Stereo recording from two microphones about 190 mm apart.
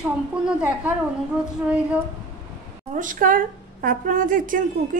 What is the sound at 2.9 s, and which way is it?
A woman's voice, 45° right (ahead or behind).